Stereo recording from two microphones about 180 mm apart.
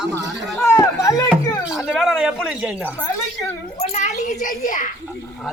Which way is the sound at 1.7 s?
5° right (ahead or behind).